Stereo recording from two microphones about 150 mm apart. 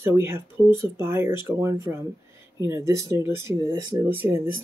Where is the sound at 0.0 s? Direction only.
15° right (ahead or behind).